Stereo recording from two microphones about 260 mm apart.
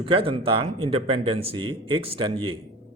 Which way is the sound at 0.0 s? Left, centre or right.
Centre.